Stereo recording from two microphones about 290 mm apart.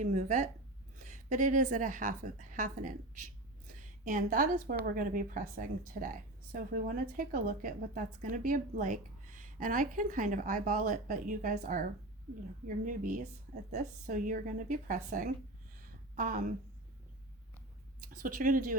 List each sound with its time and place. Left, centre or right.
0.0 s a woman's voice: right
18.1 s a woman's voice: right